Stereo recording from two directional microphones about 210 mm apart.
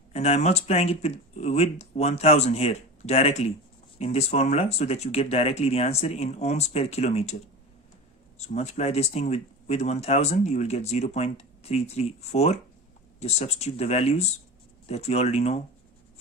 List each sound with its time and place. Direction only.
0.1 s speech: 30° left (ahead or behind)
8.4 s speech: 30° left (ahead or behind)